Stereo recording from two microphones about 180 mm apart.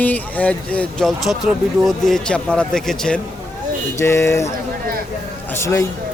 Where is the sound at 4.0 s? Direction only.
15° left (ahead or behind).